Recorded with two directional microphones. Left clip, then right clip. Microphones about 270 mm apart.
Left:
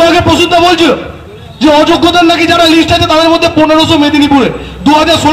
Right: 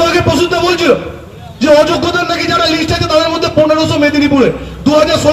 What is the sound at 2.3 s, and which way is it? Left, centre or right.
Speech, left.